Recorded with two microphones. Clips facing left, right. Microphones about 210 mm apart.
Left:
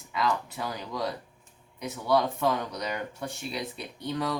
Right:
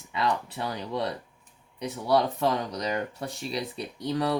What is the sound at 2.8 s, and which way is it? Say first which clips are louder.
Speech: right 3 dB; 30° right (ahead or behind).